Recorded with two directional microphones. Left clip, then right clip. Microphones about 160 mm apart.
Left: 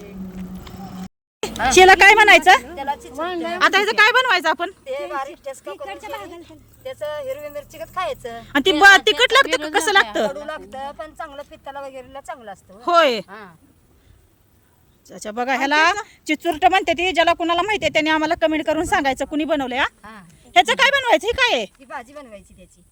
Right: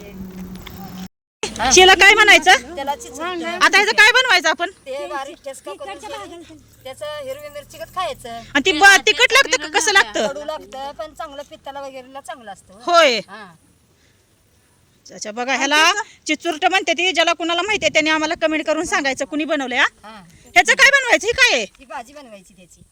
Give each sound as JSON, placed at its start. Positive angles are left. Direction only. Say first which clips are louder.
{"t": 1.7, "sound": "speech", "louder": "even", "side_deg": 5}
{"t": 2.7, "sound": "a sound", "louder": "right 1 dB", "side_deg": -20}
{"t": 3.2, "sound": "speech", "louder": "even", "side_deg": 35}
{"t": 3.6, "sound": "speech", "louder": "right 3 dB", "side_deg": 0}
{"t": 5.8, "sound": "speech", "louder": "even", "side_deg": -45}
{"t": 6.8, "sound": "speech", "louder": "left 1 dB", "side_deg": -5}
{"t": 8.4, "sound": "speech", "louder": "even", "side_deg": 10}
{"t": 10.3, "sound": "speech", "louder": "right 2 dB", "side_deg": -10}
{"t": 12.8, "sound": "speech", "louder": "right 2 dB", "side_deg": 5}
{"t": 15.1, "sound": "speech", "louder": "even", "side_deg": 15}
{"t": 20.0, "sound": "speech", "louder": "right 2 dB", "side_deg": -40}
{"t": 20.5, "sound": "speech", "louder": "right 3 dB", "side_deg": 5}
{"t": 21.8, "sound": "speech", "louder": "right 1 dB", "side_deg": -35}